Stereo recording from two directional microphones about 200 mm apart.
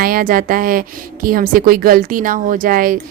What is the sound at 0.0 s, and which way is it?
A woman's voice, 45° right (ahead or behind).